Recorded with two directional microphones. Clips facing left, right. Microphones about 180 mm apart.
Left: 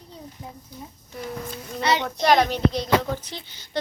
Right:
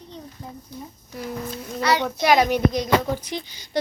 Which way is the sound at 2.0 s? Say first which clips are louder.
Even; 10° right (ahead or behind).